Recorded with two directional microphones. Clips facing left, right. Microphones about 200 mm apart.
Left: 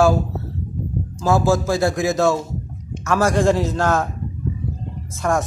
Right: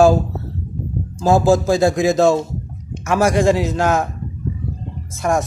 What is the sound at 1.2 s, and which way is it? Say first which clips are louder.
A man's voice: right 4 dB; 20° right (ahead or behind).